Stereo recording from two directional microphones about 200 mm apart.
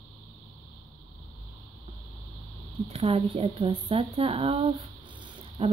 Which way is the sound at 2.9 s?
30° right (ahead or behind).